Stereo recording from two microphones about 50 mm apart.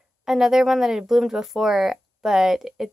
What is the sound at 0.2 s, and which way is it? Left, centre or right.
A woman's voice, centre.